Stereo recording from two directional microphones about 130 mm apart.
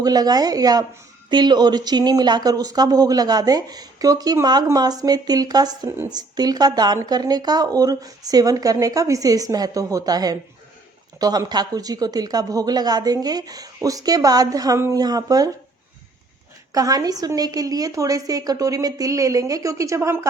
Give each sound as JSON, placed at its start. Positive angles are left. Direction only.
{"t": 0.0, "sound": "speech", "side_deg": -30}
{"t": 16.7, "sound": "speech", "side_deg": -30}